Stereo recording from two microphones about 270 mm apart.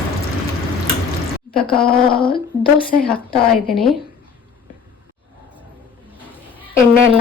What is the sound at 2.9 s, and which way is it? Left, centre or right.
Speech, left.